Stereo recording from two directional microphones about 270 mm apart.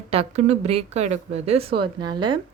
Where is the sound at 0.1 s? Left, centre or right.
Right.